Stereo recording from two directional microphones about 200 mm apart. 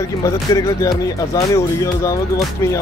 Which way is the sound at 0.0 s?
15° left (ahead or behind).